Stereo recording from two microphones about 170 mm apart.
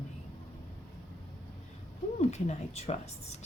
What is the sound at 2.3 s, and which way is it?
Speech, 40° left (ahead or behind).